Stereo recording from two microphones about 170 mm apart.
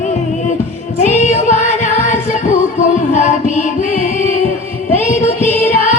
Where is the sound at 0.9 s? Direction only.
45° left (ahead or behind).